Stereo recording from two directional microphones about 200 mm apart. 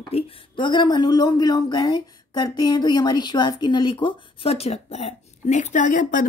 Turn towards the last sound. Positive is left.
turn(degrees=40)  # may be behind; listen again after turning